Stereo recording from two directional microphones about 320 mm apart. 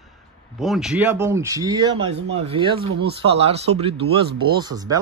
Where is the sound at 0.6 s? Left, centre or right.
Centre.